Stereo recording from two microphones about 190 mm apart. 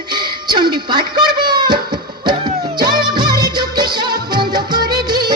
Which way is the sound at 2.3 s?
25° right (ahead or behind).